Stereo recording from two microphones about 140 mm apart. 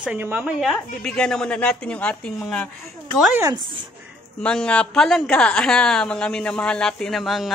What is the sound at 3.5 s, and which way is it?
Speech, 35° right (ahead or behind).